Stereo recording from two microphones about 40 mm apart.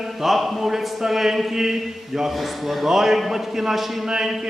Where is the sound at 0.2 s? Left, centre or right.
Centre.